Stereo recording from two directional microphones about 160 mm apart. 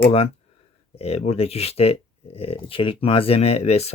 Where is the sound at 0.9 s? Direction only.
40° left (ahead or behind).